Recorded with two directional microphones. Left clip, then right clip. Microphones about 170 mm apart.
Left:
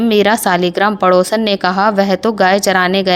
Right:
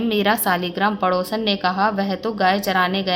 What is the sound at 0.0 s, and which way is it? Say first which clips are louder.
Speech: left 7 dB; 35° left (ahead or behind).